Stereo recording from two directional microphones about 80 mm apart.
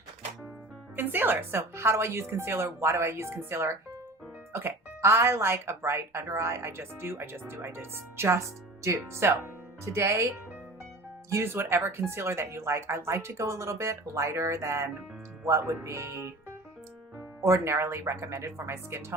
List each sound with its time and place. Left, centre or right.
0.9 s speech: right